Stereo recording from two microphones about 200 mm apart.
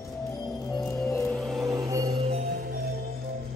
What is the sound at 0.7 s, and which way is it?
Music, centre (ahead or behind).